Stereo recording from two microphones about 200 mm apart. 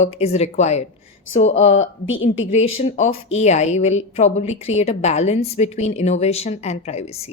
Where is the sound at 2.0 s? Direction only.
80° left.